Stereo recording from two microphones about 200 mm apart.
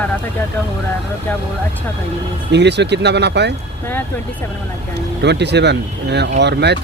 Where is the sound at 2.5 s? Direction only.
60° right (ahead or behind).